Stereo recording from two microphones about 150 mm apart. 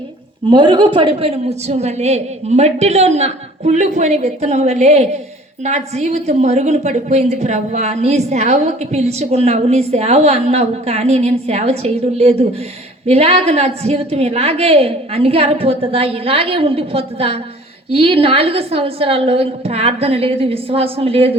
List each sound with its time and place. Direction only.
0.4 s a woman's voice: 30° right (ahead or behind)